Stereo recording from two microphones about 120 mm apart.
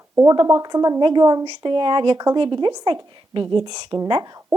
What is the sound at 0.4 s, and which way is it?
A woman's voice, 30° right (ahead or behind).